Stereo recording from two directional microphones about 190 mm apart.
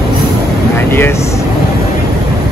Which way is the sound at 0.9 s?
10° left (ahead or behind).